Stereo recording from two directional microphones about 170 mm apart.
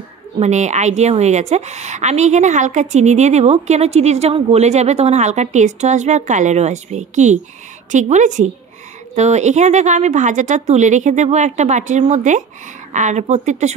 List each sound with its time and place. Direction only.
0.4 s a woman's voice: 40° right (ahead or behind)